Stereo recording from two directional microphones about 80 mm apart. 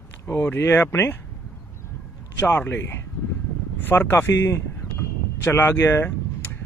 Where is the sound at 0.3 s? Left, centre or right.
Left.